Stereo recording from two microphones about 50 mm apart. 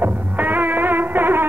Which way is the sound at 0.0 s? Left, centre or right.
Right.